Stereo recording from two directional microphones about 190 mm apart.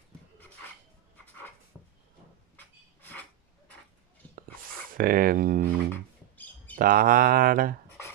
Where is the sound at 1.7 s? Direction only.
5° left (ahead or behind).